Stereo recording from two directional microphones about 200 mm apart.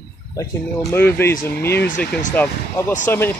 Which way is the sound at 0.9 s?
10° left (ahead or behind).